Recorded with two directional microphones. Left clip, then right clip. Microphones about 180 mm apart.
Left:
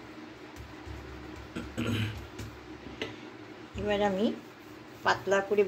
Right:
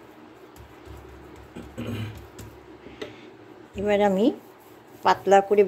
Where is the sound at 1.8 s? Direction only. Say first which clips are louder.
Left 1 dB; 10° left (ahead or behind).